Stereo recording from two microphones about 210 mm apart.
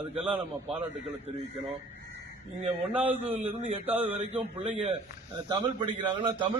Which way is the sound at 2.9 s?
10° right (ahead or behind).